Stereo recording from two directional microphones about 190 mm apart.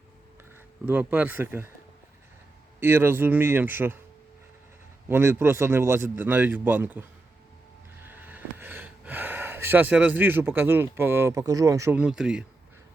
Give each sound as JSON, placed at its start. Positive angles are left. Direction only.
{"t": 0.9, "sound": "speech", "side_deg": -10}
{"t": 2.8, "sound": "speech", "side_deg": -10}
{"t": 5.0, "sound": "speech", "side_deg": -10}
{"t": 8.0, "sound": "speech", "side_deg": -10}